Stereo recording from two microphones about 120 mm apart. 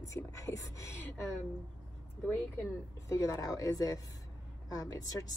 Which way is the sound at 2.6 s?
25° left (ahead or behind).